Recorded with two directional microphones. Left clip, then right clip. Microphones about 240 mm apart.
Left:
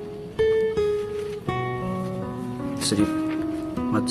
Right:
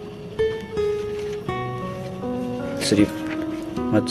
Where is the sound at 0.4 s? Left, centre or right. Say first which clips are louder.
Left 3 dB; centre.